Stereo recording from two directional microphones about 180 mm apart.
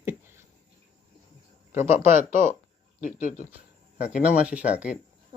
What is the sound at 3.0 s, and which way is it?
Speech, 45° left (ahead or behind).